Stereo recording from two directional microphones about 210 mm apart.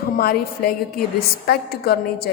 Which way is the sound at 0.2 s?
45° left (ahead or behind).